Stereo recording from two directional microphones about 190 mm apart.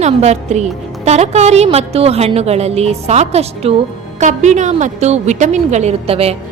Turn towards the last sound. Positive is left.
turn(degrees=-30)  # may be behind; listen again after turning